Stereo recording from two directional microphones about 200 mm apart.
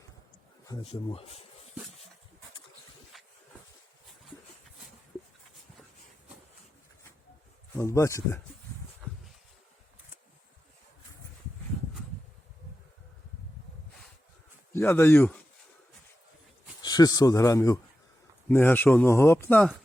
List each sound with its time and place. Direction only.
0.6 s speech: 25° left (ahead or behind)
3.1 s a sound: centre (ahead or behind)
7.8 s a man's voice: 15° left (ahead or behind)
14.7 s speech: 10° left (ahead or behind)
16.8 s a man's voice: 20° left (ahead or behind); by 19.8 s 5° left (ahead or behind)